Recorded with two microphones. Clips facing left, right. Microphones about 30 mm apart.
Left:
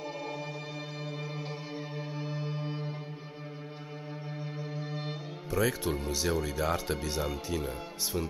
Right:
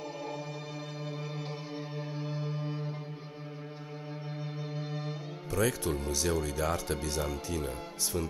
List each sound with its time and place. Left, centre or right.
2.0 s music: centre
5.5 s speech: centre